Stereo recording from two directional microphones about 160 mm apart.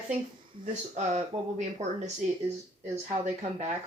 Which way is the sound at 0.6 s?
50° right (ahead or behind).